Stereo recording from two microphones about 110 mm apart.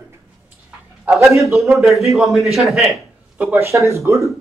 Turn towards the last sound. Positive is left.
turn(degrees=-25)  # may be behind; listen again after turning